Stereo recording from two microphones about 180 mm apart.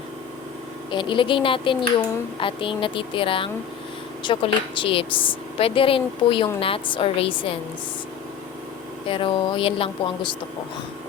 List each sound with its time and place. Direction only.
0.9 s a woman's voice: 25° left (ahead or behind)
9.0 s a woman's voice: 30° left (ahead or behind)